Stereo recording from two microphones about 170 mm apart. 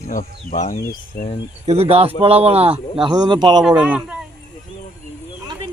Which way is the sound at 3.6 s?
10° right (ahead or behind).